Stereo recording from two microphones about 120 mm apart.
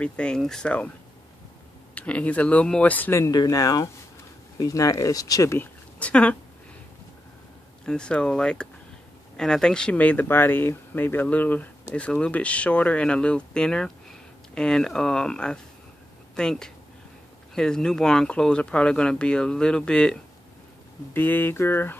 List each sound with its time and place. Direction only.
0.0 s speech: 10° left (ahead or behind)
2.0 s speech: 10° left (ahead or behind)
7.8 s speech: 5° left (ahead or behind)